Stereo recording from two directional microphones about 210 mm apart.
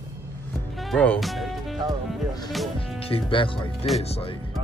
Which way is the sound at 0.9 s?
5° left (ahead or behind).